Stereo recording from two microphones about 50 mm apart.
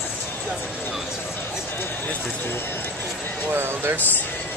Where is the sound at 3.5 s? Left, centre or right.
Right.